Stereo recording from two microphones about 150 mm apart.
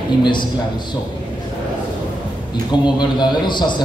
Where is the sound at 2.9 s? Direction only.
30° left (ahead or behind).